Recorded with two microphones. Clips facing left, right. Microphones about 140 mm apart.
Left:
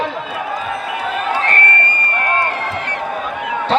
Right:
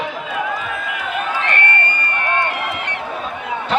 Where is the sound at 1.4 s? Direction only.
40° left (ahead or behind).